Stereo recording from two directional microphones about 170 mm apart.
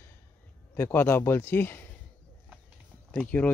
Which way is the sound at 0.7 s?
15° left (ahead or behind).